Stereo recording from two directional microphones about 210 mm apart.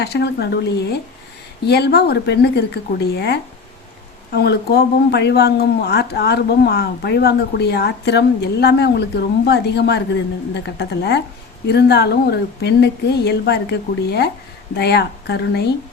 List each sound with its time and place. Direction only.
0.0 s a woman's voice: 50° left (ahead or behind)